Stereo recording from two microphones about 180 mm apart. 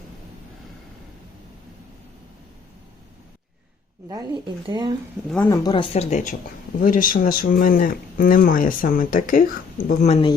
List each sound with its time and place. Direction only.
4.6 s speech: 25° right (ahead or behind)
5.5 s speech: 20° left (ahead or behind)
5.9 s speech: 40° left (ahead or behind)